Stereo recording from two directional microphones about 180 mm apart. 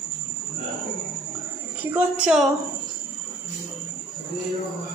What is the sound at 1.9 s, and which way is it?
Speech, 5° right (ahead or behind).